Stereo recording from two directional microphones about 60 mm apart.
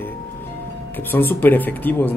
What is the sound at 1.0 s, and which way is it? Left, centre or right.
Speech, left.